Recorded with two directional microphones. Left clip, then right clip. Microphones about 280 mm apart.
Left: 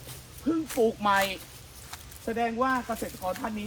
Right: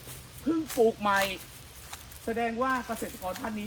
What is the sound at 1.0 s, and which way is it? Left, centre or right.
Speech, centre.